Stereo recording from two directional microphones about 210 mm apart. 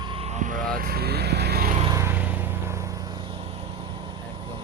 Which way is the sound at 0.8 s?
45° right (ahead or behind).